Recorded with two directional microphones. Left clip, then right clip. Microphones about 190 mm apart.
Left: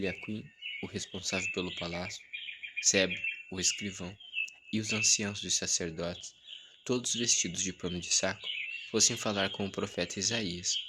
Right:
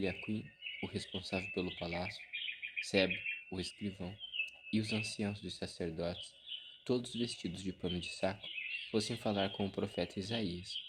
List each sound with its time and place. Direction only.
0.0 s speech: 20° left (ahead or behind)